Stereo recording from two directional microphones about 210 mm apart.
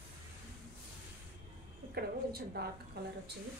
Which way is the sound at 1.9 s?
50° right (ahead or behind).